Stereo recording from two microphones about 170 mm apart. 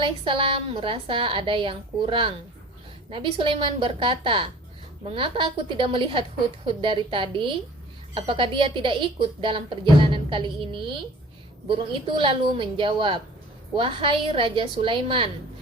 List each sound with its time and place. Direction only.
0.0 s a woman's voice: 30° right (ahead or behind)
12.0 s a woman's voice: 30° right (ahead or behind)